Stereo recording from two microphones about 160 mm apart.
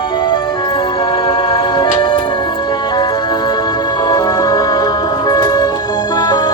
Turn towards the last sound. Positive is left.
turn(degrees=25)  # may be behind; listen again after turning